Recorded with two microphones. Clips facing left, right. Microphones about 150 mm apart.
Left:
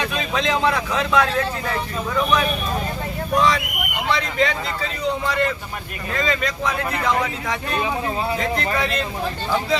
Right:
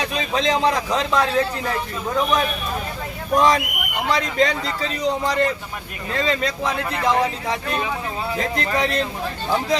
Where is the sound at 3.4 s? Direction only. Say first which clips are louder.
Right 2 dB; 45° right (ahead or behind).